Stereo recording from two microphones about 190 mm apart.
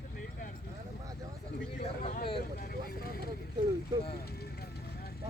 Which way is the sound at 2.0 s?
45° left (ahead or behind).